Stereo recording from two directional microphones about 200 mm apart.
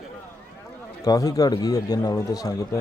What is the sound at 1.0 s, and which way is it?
Speech, 20° left (ahead or behind).